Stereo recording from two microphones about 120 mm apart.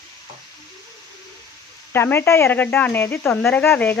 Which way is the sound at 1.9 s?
20° left (ahead or behind).